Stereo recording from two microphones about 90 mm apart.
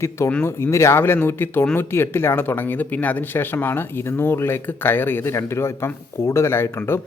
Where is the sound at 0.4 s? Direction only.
30° left (ahead or behind).